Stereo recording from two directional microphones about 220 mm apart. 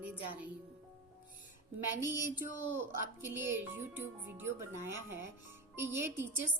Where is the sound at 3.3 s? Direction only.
10° right (ahead or behind).